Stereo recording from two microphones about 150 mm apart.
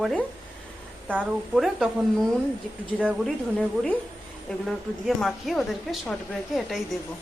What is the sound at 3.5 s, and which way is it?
A woman's voice, 5° left (ahead or behind).